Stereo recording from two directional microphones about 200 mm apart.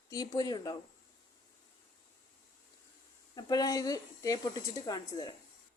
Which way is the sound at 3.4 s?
20° left (ahead or behind).